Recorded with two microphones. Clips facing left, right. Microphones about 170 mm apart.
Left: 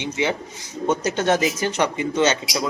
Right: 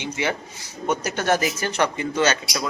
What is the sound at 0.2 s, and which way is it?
Speech, 20° left (ahead or behind).